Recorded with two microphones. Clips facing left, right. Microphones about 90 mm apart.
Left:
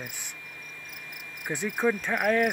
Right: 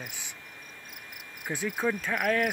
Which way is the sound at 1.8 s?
15° left (ahead or behind).